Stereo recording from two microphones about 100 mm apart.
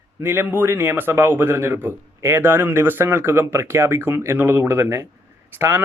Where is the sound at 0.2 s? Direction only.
25° right (ahead or behind).